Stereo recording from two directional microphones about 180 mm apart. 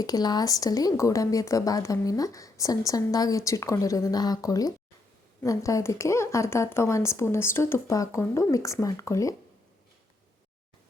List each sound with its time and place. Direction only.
0.0 s speech: 20° left (ahead or behind)